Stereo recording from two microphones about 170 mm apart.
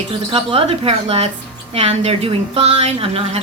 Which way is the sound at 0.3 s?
35° right (ahead or behind).